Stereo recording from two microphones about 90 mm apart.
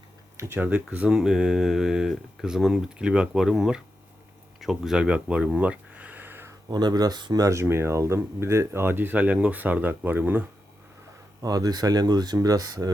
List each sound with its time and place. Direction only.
0.3 s speech: 25° right (ahead or behind)
6.7 s speech: 50° right (ahead or behind)
7.4 s speech: 30° right (ahead or behind)
11.4 s speech: 45° right (ahead or behind)